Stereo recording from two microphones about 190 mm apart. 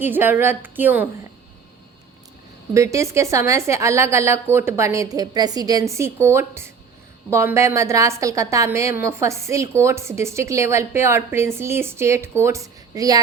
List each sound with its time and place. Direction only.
0.0 s a woman's voice: 10° right (ahead or behind)
2.7 s a woman's voice: 15° right (ahead or behind)